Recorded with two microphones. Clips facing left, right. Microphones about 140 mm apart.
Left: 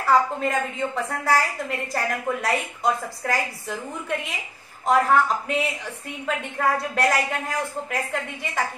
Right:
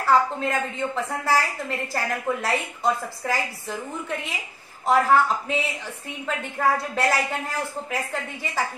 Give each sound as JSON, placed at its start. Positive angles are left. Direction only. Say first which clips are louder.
{"t": 0.1, "sound": "a woman's voice", "louder": "left 1 dB", "side_deg": 0}
{"t": 6.6, "sound": "a woman's voice", "louder": "even", "side_deg": -5}